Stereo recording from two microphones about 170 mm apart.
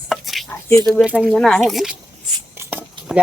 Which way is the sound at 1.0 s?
5° right (ahead or behind).